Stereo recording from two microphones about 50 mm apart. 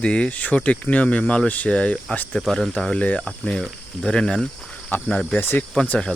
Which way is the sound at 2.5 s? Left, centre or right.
Centre.